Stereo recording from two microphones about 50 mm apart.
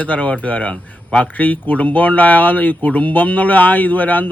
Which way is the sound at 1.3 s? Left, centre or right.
Left.